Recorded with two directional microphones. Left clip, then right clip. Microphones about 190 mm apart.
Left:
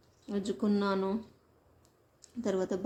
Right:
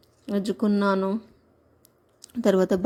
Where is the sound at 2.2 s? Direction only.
45° right (ahead or behind).